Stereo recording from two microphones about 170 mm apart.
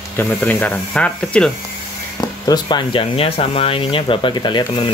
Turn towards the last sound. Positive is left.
turn(degrees=30)  # may be behind; listen again after turning